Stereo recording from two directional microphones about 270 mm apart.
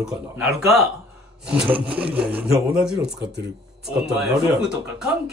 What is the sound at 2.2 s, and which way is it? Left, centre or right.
Speech, centre.